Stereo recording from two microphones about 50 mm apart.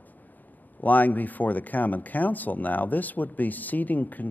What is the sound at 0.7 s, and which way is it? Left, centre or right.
Speech, left.